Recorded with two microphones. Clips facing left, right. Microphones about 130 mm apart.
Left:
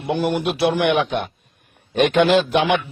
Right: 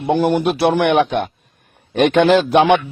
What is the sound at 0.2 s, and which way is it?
Speech, 45° right (ahead or behind).